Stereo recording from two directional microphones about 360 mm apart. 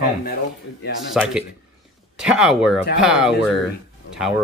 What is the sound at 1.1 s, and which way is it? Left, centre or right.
Speech, centre.